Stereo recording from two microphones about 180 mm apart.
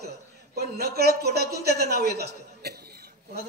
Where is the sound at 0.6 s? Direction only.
60° right (ahead or behind).